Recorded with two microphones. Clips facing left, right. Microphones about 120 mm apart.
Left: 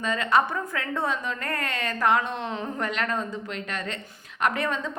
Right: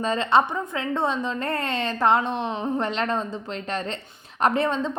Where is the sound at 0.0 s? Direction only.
30° right (ahead or behind).